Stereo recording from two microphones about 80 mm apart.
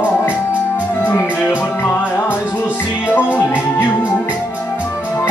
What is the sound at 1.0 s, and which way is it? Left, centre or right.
Music, left.